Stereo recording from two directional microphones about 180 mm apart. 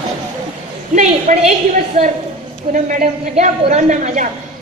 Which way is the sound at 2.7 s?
45° right (ahead or behind).